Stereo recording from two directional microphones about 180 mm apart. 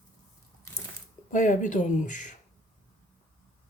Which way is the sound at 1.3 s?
45° left (ahead or behind).